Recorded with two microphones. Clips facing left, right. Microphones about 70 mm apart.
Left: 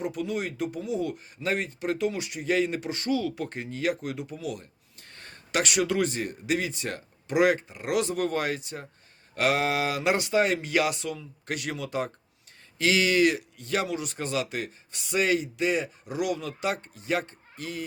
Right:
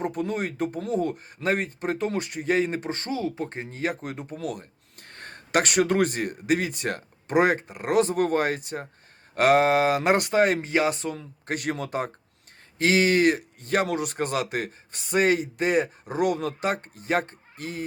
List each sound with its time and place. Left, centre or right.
0.0 s speech: right
10.7 s speech: right